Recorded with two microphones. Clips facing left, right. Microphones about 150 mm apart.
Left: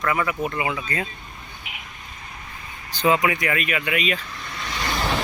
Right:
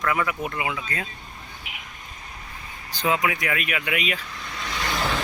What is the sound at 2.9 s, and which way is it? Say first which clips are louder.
A man's voice: left 4 dB; centre (ahead or behind).